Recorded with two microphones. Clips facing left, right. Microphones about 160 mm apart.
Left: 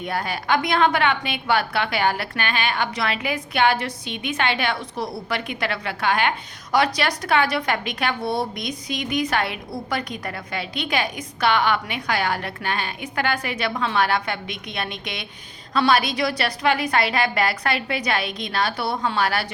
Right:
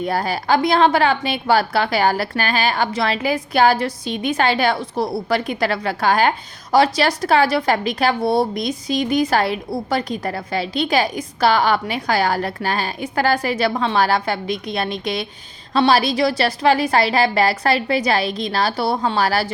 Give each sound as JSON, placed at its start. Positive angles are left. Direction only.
{"t": 0.0, "sound": "a woman's voice", "side_deg": -35}